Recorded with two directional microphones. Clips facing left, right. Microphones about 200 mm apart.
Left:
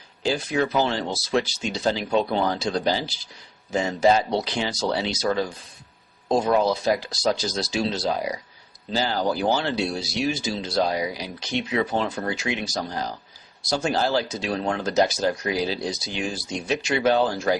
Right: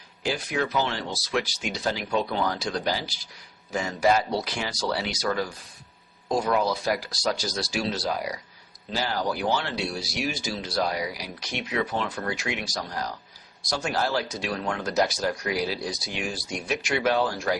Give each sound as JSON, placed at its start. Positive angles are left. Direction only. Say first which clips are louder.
{"t": 0.2, "sound": "speech", "louder": "left 4 dB", "side_deg": 30}